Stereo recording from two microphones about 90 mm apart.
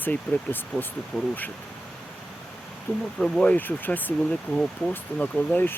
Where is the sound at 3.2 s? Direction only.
10° left (ahead or behind).